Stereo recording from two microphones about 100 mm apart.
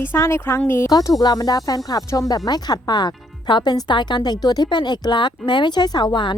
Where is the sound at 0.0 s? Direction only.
25° left (ahead or behind).